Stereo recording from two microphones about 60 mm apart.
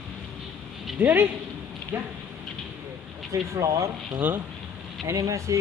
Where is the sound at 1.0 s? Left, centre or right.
Right.